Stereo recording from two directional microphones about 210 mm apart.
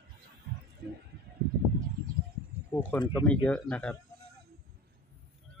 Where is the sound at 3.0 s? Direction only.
20° left (ahead or behind).